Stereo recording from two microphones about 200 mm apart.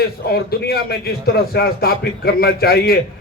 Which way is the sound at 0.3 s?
50° left (ahead or behind).